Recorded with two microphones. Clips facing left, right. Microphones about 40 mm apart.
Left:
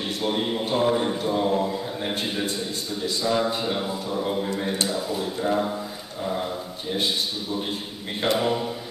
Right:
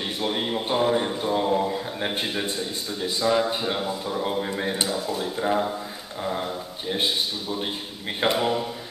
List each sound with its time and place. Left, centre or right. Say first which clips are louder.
0.0 s a man's voice: left 1 dB; centre
0.7 s mantra: left 1 dB; centre
3.8 s speech: even; centre
4.2 s speech: left 1 dB; centre
4.8 s speech: even; centre
5.3 s mantra: even; centre
8.2 s speech: even; centre